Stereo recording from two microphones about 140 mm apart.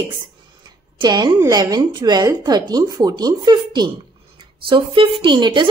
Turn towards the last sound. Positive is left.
turn(degrees=-35)  # may be behind; listen again after turning